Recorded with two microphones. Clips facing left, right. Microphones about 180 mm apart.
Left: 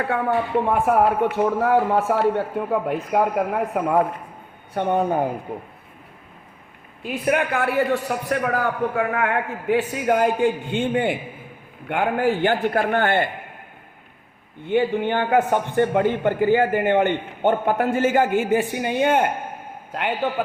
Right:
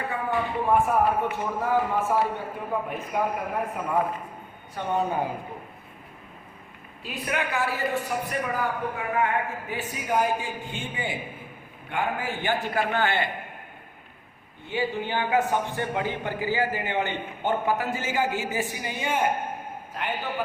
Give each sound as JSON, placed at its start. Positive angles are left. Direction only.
{"t": 0.1, "sound": "speech", "side_deg": 70}
{"t": 4.7, "sound": "speech", "side_deg": 55}
{"t": 7.0, "sound": "a man's voice", "side_deg": 55}
{"t": 9.0, "sound": "a man's voice", "side_deg": 85}
{"t": 14.7, "sound": "a man's voice", "side_deg": 55}